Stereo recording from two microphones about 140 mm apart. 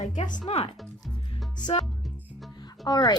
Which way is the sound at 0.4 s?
45° left (ahead or behind).